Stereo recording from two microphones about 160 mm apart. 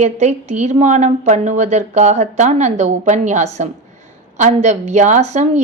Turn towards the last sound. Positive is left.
turn(degrees=-45)  # may be behind; listen again after turning